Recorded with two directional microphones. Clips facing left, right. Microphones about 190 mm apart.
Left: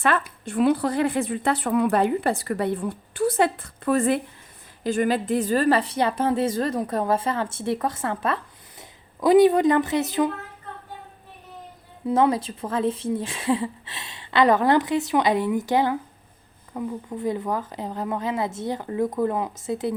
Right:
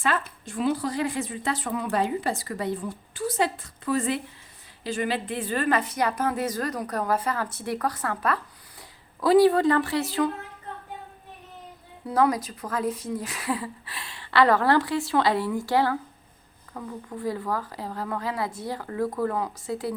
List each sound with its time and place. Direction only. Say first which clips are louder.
0.0 s a woman's voice: left 4 dB; 60° left (ahead or behind); by 10.2 s 20° left (ahead or behind)
12.0 s speech: left 3 dB; 25° left (ahead or behind)